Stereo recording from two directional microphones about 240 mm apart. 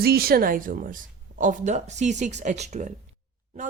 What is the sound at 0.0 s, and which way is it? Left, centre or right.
A woman's voice, right.